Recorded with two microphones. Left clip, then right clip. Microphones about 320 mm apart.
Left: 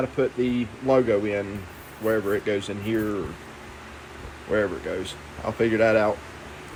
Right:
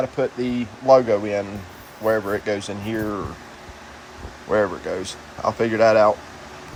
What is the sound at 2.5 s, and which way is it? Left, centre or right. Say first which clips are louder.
Speech: right 1 dB; centre.